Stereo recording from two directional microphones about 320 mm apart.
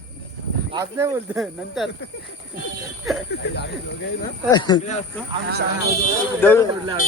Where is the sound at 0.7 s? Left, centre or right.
Centre.